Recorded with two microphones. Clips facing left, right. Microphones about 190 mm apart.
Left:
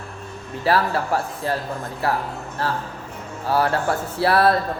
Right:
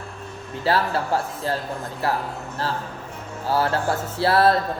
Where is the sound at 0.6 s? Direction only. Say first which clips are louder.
Left 2 dB; 25° right (ahead or behind).